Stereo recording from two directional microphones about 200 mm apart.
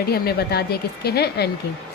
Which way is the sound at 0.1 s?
50° left (ahead or behind).